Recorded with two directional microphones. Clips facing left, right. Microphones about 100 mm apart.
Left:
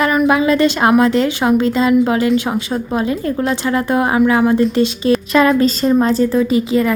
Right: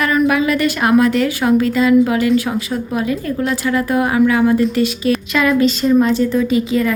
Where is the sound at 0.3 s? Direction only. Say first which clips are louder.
Left 3 dB; 25° left (ahead or behind).